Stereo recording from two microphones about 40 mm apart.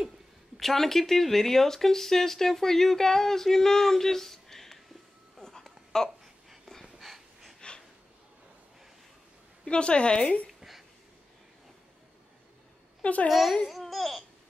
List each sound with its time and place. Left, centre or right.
0.6 s speech: centre
6.0 s babbling: centre
6.8 s wheeze: centre
9.7 s a woman's voice: left
13.0 s a child's voice: left
13.3 s speech: centre